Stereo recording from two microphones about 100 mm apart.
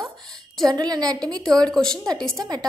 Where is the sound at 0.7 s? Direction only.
40° right (ahead or behind).